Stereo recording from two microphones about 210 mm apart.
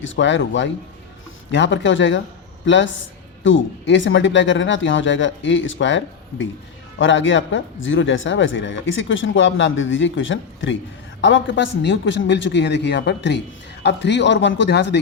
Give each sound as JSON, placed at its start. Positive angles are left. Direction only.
{"t": 0.0, "sound": "speech", "side_deg": 60}
{"t": 7.0, "sound": "speech", "side_deg": 65}